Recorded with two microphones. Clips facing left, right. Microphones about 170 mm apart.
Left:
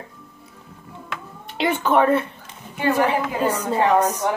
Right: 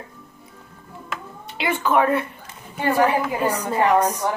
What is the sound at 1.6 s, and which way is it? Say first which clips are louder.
Speech: left 2 dB; 40° left (ahead or behind).